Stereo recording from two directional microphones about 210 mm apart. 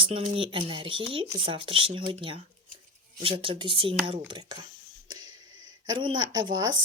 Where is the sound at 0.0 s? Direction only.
25° right (ahead or behind).